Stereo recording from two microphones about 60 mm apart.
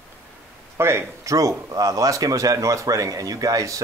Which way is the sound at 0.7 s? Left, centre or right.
Right.